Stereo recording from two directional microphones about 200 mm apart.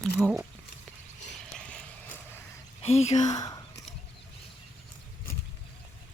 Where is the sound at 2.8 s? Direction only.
30° left (ahead or behind).